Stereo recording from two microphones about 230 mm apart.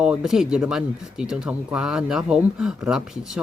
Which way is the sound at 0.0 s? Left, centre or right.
Centre.